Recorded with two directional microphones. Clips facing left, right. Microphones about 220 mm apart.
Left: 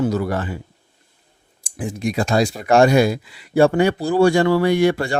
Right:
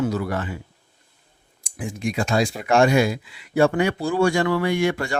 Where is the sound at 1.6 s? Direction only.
35° left (ahead or behind).